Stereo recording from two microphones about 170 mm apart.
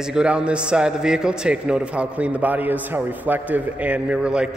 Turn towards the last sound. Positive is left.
turn(degrees=-5)  # may be behind; listen again after turning